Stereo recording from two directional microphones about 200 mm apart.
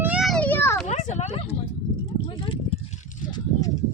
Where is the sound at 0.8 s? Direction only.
35° left (ahead or behind).